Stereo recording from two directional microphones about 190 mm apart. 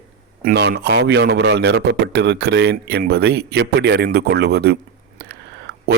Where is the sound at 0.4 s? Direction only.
55° right (ahead or behind).